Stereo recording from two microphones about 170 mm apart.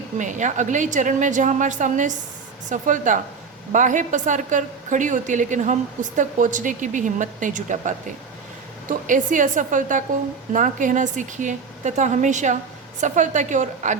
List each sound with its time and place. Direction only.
0.2 s a woman's voice: 45° right (ahead or behind)